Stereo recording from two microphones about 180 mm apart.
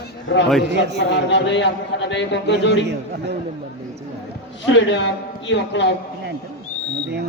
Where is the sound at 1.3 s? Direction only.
80° left.